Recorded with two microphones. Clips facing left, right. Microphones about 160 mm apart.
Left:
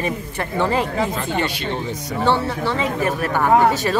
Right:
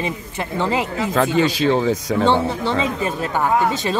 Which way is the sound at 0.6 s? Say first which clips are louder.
Left 1 dB; 15° right (ahead or behind).